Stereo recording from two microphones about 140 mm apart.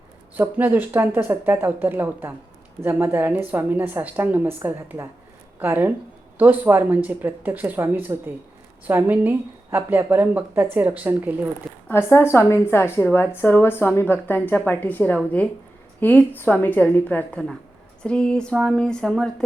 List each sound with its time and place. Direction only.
0.3 s a woman's voice: 15° right (ahead or behind)
11.9 s a woman's voice: 15° left (ahead or behind)